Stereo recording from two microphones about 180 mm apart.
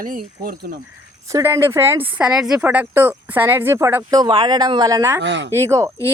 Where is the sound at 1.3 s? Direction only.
15° right (ahead or behind).